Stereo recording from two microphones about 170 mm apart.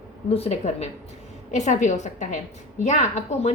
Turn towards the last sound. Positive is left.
turn(degrees=45)  # may be behind; listen again after turning